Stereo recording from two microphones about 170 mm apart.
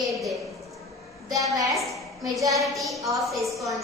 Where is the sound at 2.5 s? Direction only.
Centre (ahead or behind).